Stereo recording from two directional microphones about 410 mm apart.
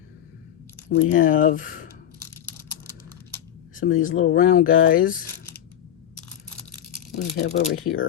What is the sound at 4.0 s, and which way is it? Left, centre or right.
Speech, centre.